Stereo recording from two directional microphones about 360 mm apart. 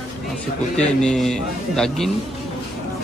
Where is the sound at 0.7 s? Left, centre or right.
Centre.